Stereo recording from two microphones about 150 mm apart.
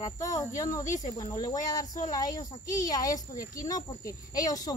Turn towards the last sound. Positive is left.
turn(degrees=25)  # may be behind; listen again after turning